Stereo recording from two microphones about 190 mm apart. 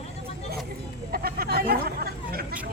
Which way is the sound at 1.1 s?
50° right (ahead or behind).